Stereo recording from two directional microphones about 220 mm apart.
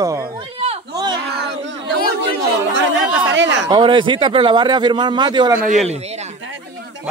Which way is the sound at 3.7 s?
20° right (ahead or behind).